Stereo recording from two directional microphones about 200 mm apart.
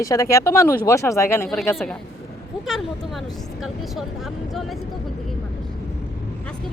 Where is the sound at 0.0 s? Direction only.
15° left (ahead or behind).